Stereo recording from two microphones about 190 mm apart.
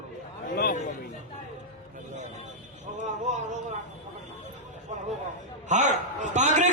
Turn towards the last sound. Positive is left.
turn(degrees=-40)  # may be behind; listen again after turning